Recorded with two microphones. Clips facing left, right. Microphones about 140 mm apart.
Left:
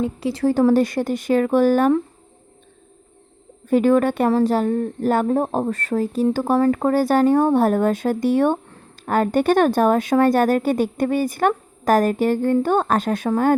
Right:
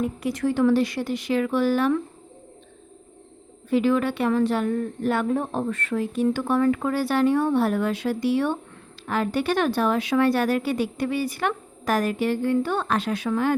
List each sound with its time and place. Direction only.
0.0 s speech: 30° left (ahead or behind); by 2.0 s 45° left (ahead or behind)
3.7 s a woman's voice: 45° left (ahead or behind)